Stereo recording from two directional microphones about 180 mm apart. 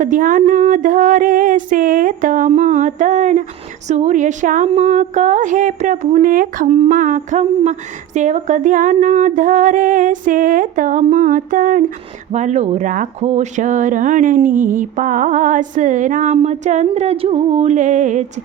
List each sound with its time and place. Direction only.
0.0 s a sound: 45° right (ahead or behind)
3.8 s speech: 40° right (ahead or behind)
6.2 s speech: 50° right (ahead or behind)